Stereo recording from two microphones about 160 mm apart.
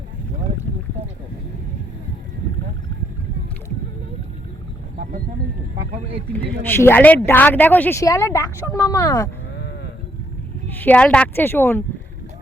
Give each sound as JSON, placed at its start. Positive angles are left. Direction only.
{"t": 6.7, "sound": "a woman's voice", "side_deg": 10}
{"t": 10.8, "sound": "a woman's voice", "side_deg": 10}